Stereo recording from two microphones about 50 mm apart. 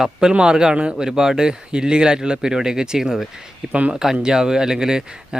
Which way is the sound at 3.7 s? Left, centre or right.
Right.